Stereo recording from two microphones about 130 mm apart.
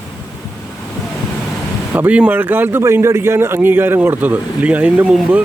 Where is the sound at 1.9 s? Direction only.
10° right (ahead or behind).